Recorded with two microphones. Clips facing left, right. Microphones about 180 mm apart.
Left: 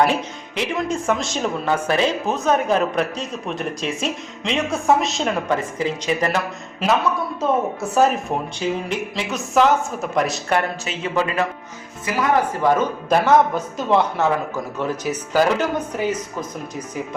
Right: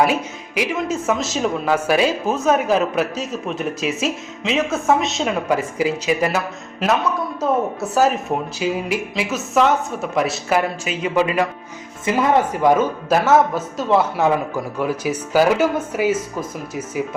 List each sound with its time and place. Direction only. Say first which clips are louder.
0.0 s speech: right 1 dB; 10° right (ahead or behind)
12.0 s speech: right 3 dB; 25° right (ahead or behind)
12.6 s speech: right 3 dB; 5° right (ahead or behind)